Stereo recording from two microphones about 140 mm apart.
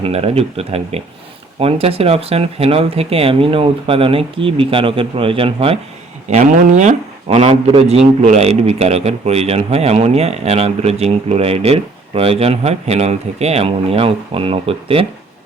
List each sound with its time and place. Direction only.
0.0 s speech: 45° right (ahead or behind)
6.3 s speech: 60° right (ahead or behind); by 15.0 s 40° right (ahead or behind)